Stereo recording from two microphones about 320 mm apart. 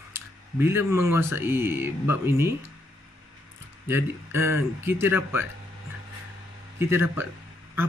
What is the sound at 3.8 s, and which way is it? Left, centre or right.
A man's voice, centre.